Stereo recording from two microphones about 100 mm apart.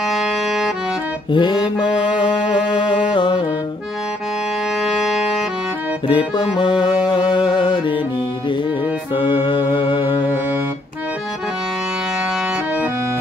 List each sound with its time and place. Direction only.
0.0 s music: centre (ahead or behind)
1.3 s music: 55° left (ahead or behind)
4.7 s music: centre (ahead or behind)
6.0 s music: 55° left (ahead or behind)
9.1 s music: 55° left (ahead or behind)
10.2 s music: 20° right (ahead or behind)